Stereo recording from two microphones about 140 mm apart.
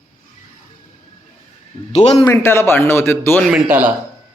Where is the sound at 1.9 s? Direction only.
50° left (ahead or behind).